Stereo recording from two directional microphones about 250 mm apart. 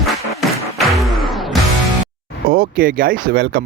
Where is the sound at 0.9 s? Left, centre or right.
Centre.